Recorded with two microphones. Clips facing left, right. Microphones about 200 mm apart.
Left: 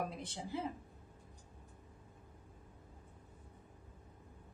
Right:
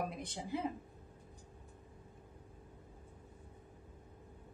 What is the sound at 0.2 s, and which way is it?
Speech, 15° right (ahead or behind).